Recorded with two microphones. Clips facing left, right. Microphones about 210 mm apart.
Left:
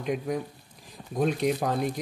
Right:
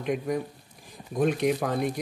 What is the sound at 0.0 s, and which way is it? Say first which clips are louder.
Speech: right 1 dB; 55° right (ahead or behind).